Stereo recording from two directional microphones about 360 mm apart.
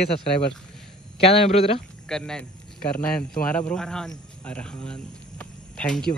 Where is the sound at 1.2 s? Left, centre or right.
Centre.